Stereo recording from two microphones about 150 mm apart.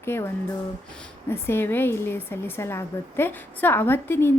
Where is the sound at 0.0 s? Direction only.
15° left (ahead or behind).